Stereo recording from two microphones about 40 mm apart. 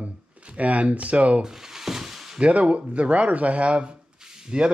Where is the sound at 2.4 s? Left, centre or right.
Right.